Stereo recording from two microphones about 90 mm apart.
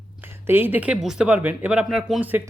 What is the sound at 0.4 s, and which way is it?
Speech, 25° right (ahead or behind).